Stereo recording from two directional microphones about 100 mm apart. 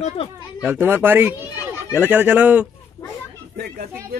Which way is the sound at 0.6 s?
20° right (ahead or behind).